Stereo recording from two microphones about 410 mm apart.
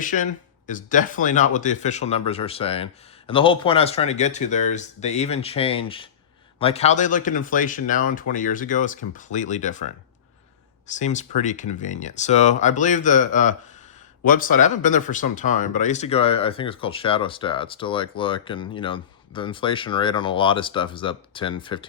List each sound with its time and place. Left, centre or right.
0.0 s speech: centre